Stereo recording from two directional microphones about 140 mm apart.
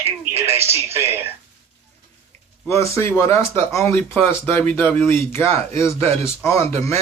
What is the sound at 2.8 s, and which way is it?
Speech, 20° left (ahead or behind).